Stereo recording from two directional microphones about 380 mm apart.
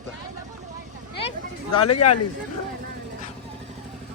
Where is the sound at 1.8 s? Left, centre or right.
Left.